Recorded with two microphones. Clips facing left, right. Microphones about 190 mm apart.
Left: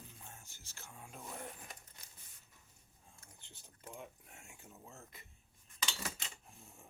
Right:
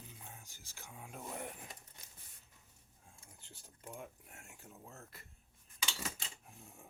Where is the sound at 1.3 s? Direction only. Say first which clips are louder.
Right 3 dB; 20° right (ahead or behind).